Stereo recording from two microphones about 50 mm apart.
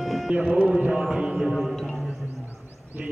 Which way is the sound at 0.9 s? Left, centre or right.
Centre.